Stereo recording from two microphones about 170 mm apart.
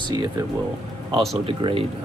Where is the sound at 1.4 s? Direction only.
35° right (ahead or behind).